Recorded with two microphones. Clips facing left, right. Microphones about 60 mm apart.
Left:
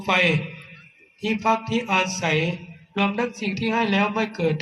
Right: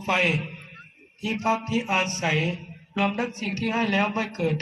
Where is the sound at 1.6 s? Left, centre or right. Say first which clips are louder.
Left 2 dB; left.